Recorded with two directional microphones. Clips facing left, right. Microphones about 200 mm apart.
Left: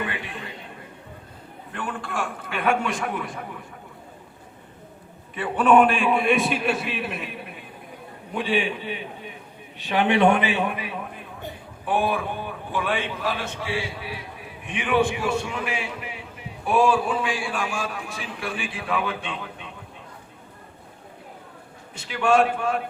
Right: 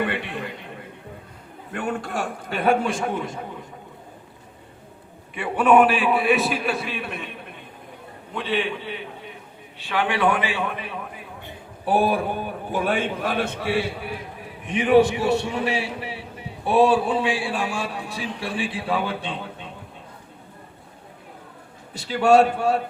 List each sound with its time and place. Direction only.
0.0 s a man's voice: 60° right (ahead or behind)
1.7 s a man's voice: 45° right (ahead or behind); by 3.4 s 25° right (ahead or behind)
5.3 s a man's voice: 10° right (ahead or behind); by 10.7 s 20° left (ahead or behind)
11.9 s a man's voice: 35° right (ahead or behind); by 14.2 s 55° right (ahead or behind)
14.7 s a man's voice: 40° right (ahead or behind)
21.9 s a man's voice: 35° right (ahead or behind)